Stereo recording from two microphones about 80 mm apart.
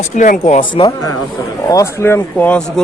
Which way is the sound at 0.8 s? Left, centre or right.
Left.